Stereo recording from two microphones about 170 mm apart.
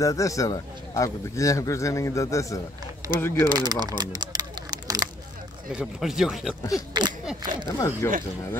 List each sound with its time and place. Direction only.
0.0 s a man's voice: 20° left (ahead or behind)
3.4 s a sound: 25° right (ahead or behind)
5.7 s speech: 5° right (ahead or behind)
6.9 s speech: 25° right (ahead or behind)
8.0 s speech: 15° left (ahead or behind)